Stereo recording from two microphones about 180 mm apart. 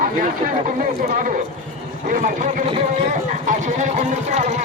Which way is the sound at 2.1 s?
45° right (ahead or behind).